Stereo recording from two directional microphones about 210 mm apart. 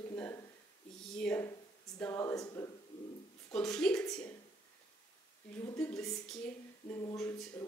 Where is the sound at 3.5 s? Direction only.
5° left (ahead or behind).